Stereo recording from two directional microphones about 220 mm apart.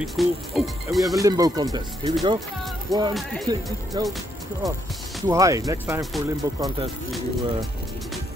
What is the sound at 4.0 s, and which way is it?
Speech, 20° right (ahead or behind).